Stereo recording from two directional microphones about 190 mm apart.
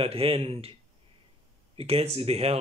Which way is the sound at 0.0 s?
30° right (ahead or behind).